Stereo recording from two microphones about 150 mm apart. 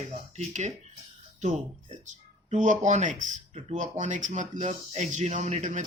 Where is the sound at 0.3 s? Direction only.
50° right (ahead or behind).